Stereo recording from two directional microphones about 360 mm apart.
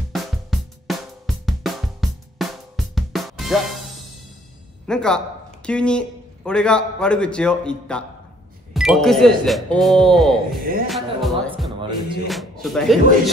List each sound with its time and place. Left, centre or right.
0.1 s music: centre
4.8 s a man's voice: centre
10.6 s a man's voice: right
10.9 s music: centre
12.3 s a man's voice: centre